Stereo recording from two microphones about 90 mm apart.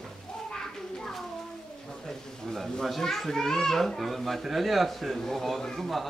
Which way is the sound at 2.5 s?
5° left (ahead or behind).